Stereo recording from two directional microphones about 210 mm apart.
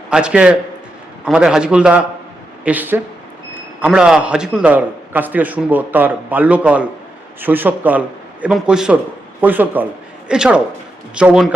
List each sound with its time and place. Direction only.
0.1 s a man's voice: 5° right (ahead or behind)